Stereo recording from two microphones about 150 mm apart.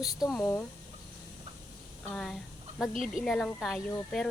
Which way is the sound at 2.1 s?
5° left (ahead or behind).